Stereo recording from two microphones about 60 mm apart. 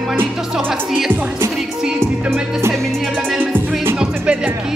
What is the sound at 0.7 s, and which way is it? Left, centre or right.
Speech, centre.